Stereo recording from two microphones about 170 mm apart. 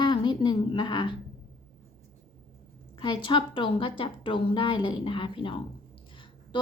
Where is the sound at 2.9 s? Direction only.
30° left (ahead or behind).